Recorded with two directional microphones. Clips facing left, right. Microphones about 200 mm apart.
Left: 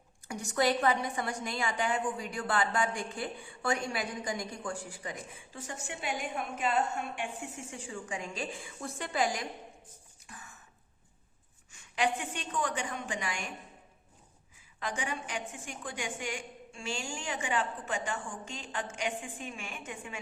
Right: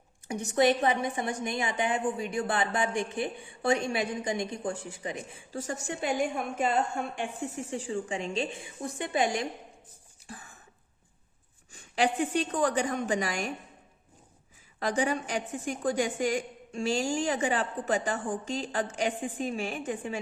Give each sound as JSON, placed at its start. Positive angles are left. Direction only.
{"t": 0.3, "sound": "a woman's voice", "side_deg": -20}
{"t": 5.5, "sound": "a woman's voice", "side_deg": -40}
{"t": 10.2, "sound": "a sound", "side_deg": -30}
{"t": 11.7, "sound": "a woman's voice", "side_deg": -35}
{"t": 14.8, "sound": "a woman's voice", "side_deg": -40}